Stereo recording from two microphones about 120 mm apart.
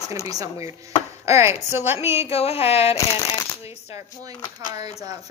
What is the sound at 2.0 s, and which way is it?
Speech, 55° left (ahead or behind).